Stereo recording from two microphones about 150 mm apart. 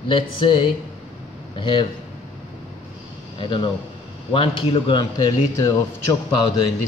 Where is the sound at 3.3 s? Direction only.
30° left (ahead or behind).